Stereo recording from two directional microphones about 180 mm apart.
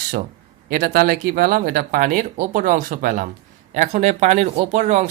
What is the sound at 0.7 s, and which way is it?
Speech, 55° right (ahead or behind).